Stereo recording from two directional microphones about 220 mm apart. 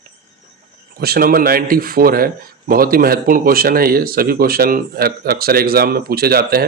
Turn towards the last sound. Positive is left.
turn(degrees=-45)  # may be behind; listen again after turning